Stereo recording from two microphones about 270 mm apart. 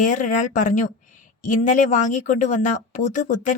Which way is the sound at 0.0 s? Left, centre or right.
Left.